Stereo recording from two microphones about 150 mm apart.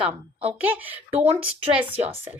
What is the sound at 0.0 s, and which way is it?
Speech, 10° right (ahead or behind).